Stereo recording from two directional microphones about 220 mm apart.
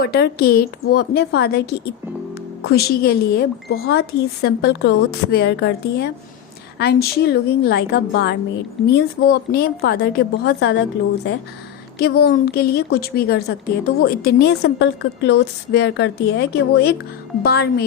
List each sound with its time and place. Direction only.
0.0 s a woman's voice: 45° left (ahead or behind)
11.9 s a woman's voice: 45° left (ahead or behind)